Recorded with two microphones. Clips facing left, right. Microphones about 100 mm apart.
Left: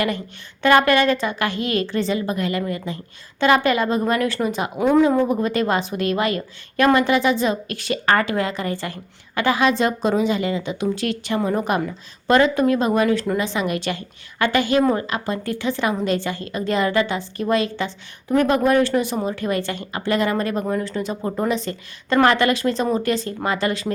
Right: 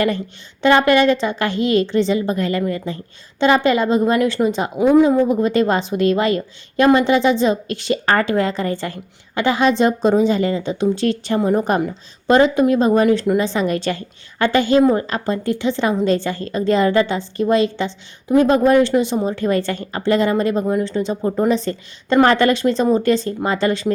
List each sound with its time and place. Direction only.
0.6 s a woman's voice: 25° right (ahead or behind)
4.8 s a woman's voice: 15° right (ahead or behind)